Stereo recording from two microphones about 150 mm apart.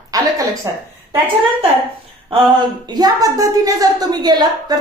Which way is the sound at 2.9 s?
25° right (ahead or behind).